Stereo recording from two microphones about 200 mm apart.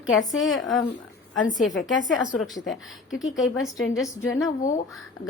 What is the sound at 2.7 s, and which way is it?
Speech, 70° left (ahead or behind).